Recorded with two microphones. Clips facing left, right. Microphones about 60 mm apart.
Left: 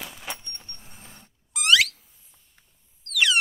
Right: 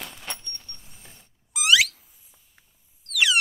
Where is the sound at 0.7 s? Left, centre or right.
Left.